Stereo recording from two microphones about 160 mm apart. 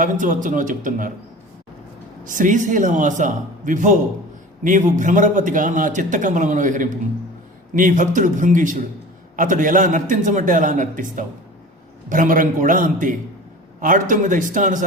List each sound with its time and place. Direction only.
0.0 s a man's voice: 55° right (ahead or behind)
2.2 s a man's voice: 55° right (ahead or behind)